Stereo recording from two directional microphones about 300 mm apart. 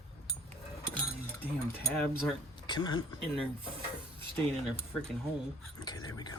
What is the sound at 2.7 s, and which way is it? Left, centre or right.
Speech, centre.